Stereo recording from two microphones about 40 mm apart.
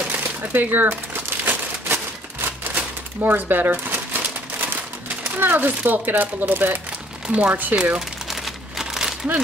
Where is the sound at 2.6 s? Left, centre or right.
Right.